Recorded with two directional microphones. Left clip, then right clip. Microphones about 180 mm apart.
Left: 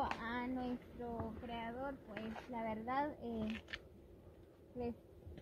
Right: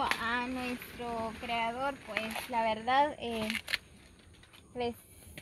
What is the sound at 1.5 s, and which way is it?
Speech, 10° left (ahead or behind).